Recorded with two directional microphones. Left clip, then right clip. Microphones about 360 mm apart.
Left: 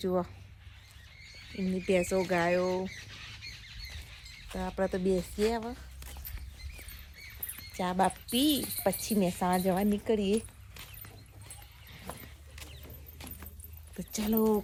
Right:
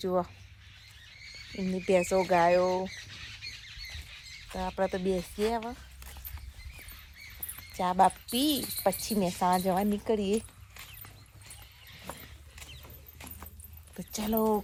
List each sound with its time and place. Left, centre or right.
0.0 s speech: centre
1.9 s speech: centre
2.9 s squawk: left
4.4 s speech: centre
7.7 s speech: centre
13.1 s keys jangling: centre
13.9 s speech: centre